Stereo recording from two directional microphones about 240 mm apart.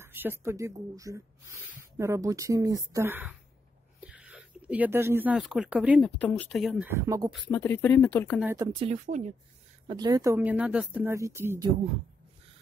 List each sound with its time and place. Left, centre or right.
0.0 s speech: centre
6.9 s speech: centre
7.2 s speech: centre
8.4 s speech: centre
8.7 s speech: right
9.8 s speech: centre